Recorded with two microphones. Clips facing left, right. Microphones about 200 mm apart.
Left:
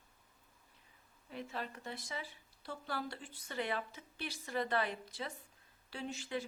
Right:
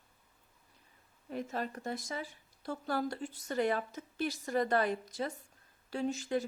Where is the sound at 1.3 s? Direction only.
45° right (ahead or behind).